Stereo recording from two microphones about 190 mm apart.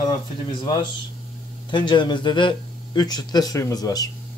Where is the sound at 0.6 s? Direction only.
25° left (ahead or behind).